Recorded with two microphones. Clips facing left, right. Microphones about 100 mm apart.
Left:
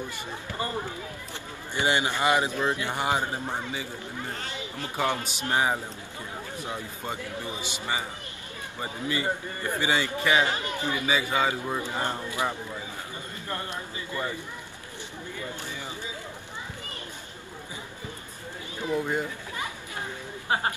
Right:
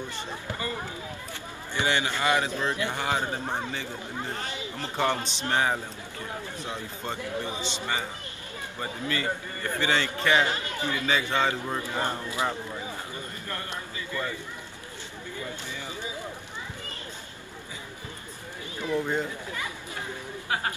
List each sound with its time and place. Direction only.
1.9 s a man's voice: 15° left (ahead or behind)
4.8 s a man's voice: 15° left (ahead or behind)
13.5 s a man's voice: 25° left (ahead or behind)
18.8 s run: 20° left (ahead or behind)
20.4 s speech: 30° left (ahead or behind)